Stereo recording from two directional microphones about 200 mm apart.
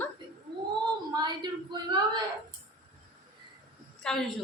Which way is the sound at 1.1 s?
20° right (ahead or behind).